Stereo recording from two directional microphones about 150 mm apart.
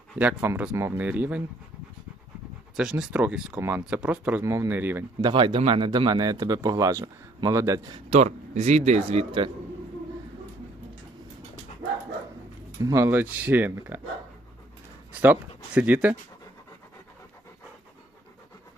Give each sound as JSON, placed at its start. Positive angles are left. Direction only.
{"t": 0.2, "sound": "speech", "side_deg": -10}
{"t": 2.7, "sound": "speech", "side_deg": -5}
{"t": 3.6, "sound": "speech", "side_deg": -15}
{"t": 4.4, "sound": "speech", "side_deg": -20}
{"t": 5.3, "sound": "speech", "side_deg": -35}
{"t": 8.1, "sound": "speech", "side_deg": -50}
{"t": 12.8, "sound": "speech", "side_deg": -20}
{"t": 15.2, "sound": "speech", "side_deg": -10}